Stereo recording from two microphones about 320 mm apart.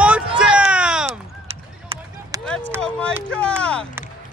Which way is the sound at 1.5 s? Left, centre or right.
Centre.